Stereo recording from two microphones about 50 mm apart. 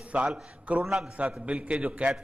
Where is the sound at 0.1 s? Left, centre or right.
Right.